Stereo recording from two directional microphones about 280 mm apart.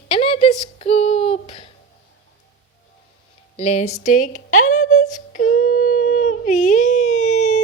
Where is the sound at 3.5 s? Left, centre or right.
Left.